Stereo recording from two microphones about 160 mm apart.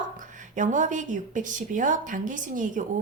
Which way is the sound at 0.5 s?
50° right (ahead or behind).